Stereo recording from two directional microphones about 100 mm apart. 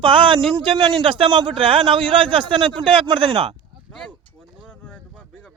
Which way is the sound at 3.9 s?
5° left (ahead or behind).